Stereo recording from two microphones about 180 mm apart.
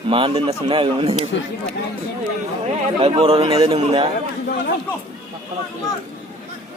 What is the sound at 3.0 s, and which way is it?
A man's voice, 35° right (ahead or behind).